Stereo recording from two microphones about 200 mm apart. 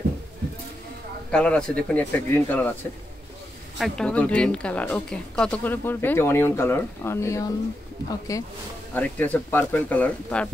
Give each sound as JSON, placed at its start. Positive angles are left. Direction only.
{"t": 1.3, "sound": "a woman's voice", "side_deg": 5}
{"t": 3.7, "sound": "a woman's voice", "side_deg": 0}